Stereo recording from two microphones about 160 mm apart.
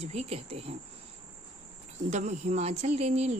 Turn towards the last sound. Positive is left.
turn(degrees=-45)  # may be behind; listen again after turning